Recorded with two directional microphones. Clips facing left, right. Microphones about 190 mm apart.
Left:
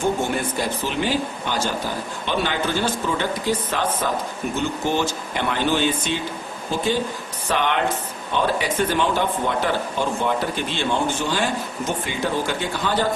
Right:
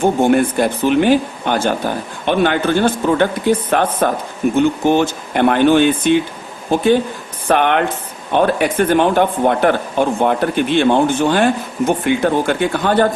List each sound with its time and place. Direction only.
0.0 s speech: 60° right (ahead or behind)